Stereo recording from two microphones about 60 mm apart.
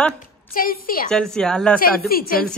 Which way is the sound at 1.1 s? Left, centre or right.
Centre.